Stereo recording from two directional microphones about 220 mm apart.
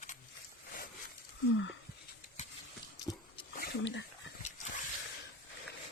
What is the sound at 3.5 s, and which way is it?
Dog, 50° left (ahead or behind).